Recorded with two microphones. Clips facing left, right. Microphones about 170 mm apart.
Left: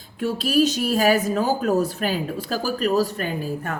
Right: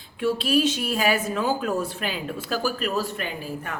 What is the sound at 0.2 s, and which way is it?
A woman's voice, 40° left (ahead or behind).